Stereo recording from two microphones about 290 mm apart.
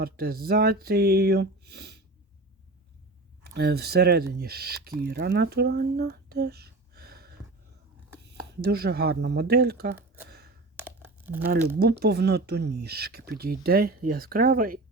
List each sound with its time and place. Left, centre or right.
0.0 s speech: right
3.4 s speech: right
10.8 s crumpling: centre
11.8 s speech: right